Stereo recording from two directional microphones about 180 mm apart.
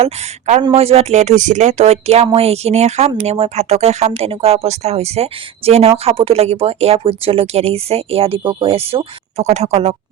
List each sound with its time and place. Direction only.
0.0 s speech: 40° right (ahead or behind)